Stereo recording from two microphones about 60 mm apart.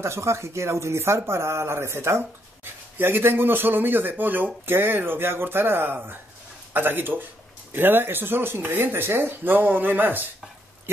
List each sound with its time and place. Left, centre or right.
0.0 s speech: right